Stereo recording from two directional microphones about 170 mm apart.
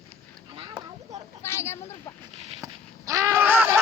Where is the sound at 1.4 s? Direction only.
15° left (ahead or behind).